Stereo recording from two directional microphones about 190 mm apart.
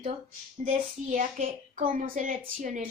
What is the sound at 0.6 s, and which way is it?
A woman's voice, 45° right (ahead or behind).